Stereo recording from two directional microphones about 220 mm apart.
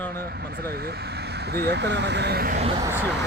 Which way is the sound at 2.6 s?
25° right (ahead or behind).